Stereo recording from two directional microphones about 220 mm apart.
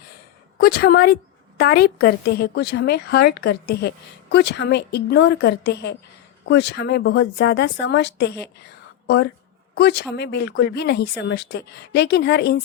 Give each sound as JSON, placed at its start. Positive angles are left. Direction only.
{"t": 0.6, "sound": "a woman's voice", "side_deg": 45}